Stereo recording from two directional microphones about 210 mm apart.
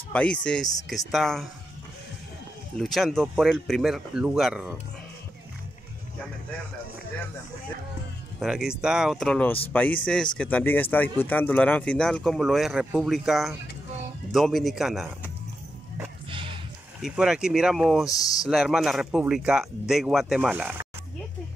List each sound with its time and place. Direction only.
0.1 s speech: 5° left (ahead or behind)
2.8 s speech: centre (ahead or behind)
8.4 s speech: 5° right (ahead or behind)
16.3 s music: 25° right (ahead or behind)
17.0 s speech: 5° right (ahead or behind)
18.0 s speech: 15° left (ahead or behind)
18.5 s speech: centre (ahead or behind)